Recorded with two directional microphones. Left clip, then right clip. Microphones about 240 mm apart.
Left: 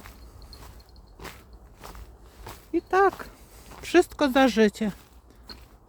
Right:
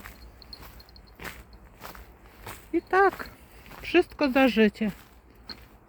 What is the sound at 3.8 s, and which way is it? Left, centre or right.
Speech, centre.